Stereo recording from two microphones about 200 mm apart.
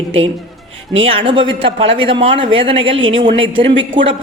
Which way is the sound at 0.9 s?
30° right (ahead or behind).